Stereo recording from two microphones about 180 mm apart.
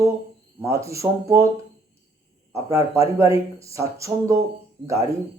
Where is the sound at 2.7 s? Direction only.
15° right (ahead or behind).